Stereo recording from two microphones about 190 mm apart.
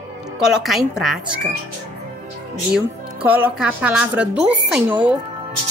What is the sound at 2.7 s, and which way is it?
Speech, 10° right (ahead or behind).